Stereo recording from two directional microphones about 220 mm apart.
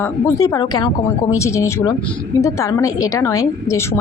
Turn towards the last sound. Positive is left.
turn(degrees=15)  # may be behind; listen again after turning